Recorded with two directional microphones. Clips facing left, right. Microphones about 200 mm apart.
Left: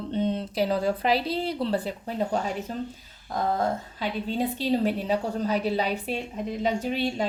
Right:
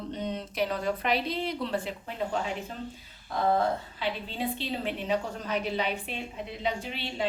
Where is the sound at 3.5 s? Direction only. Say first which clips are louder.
Even; 45° left (ahead or behind).